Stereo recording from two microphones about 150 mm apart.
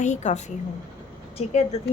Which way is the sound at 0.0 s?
50° left (ahead or behind).